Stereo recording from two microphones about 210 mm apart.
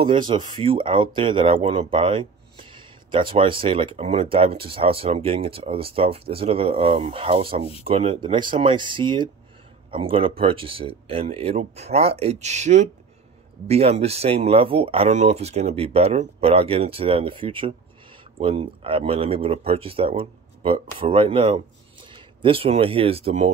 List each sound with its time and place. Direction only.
0.0 s speech: 20° right (ahead or behind)